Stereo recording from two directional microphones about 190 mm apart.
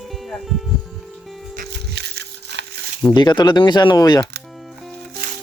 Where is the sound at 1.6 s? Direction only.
60° right (ahead or behind).